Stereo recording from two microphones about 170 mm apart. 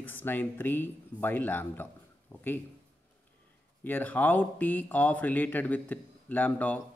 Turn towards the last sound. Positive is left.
turn(degrees=10)  # may be behind; listen again after turning